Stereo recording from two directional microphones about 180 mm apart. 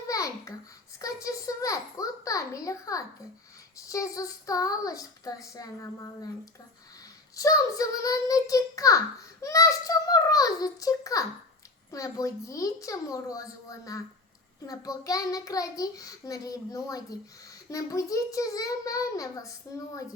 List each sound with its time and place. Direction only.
0.1 s babbling: 20° left (ahead or behind)
0.9 s a sound: 20° left (ahead or behind)
3.8 s a child's voice: 20° left (ahead or behind)